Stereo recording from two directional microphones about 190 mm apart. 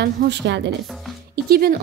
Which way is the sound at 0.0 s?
60° right (ahead or behind).